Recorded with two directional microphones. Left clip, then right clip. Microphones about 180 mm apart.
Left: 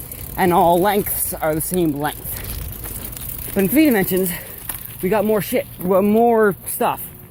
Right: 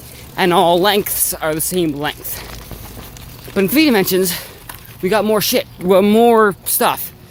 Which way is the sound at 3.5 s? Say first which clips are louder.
Right 3 dB; 20° right (ahead or behind).